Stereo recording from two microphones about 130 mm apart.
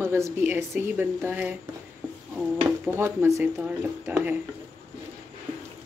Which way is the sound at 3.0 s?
20° right (ahead or behind).